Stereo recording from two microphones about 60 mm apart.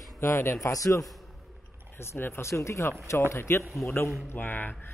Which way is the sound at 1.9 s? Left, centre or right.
Left.